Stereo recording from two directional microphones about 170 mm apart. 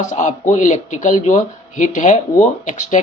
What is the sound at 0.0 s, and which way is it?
Speech, 45° left (ahead or behind).